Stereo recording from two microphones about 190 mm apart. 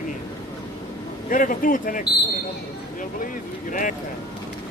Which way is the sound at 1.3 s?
45° left (ahead or behind).